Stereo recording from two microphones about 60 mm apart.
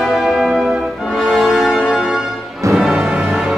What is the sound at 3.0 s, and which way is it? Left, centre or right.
Music, centre.